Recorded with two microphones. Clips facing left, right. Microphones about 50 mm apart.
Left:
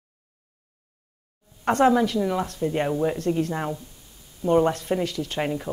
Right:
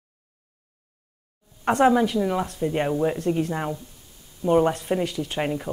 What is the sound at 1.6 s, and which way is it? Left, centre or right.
Speech, centre.